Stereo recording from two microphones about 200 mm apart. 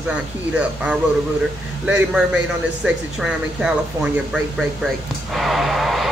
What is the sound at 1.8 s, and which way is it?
Speech, 5° right (ahead or behind).